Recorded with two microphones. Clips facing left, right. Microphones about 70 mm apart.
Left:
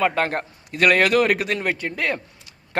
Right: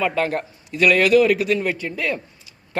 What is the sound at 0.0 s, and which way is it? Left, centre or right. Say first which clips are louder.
A man's voice: even; left.